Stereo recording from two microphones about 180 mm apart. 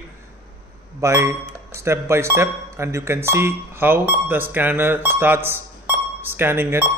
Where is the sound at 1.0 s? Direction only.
15° right (ahead or behind).